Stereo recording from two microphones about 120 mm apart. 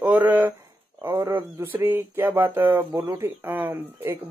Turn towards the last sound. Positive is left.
turn(degrees=-15)  # may be behind; listen again after turning